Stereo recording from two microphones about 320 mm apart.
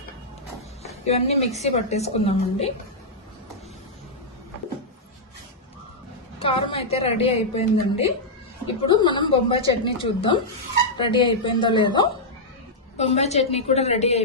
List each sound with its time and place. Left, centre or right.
0.8 s a woman's voice: centre
6.4 s a woman's voice: centre